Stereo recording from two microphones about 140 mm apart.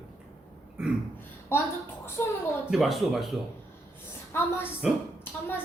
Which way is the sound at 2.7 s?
Centre (ahead or behind).